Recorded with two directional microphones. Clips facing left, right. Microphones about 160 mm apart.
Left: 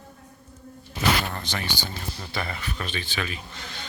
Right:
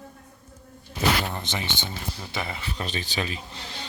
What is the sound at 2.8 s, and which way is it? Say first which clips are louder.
Speech: right 2 dB; 40° right (ahead or behind).